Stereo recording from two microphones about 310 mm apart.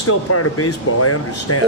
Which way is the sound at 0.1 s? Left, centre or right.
Left.